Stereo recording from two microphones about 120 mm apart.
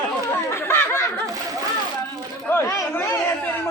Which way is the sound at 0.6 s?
20° left (ahead or behind).